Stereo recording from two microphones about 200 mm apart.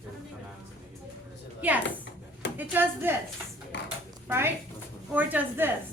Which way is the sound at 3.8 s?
10° right (ahead or behind).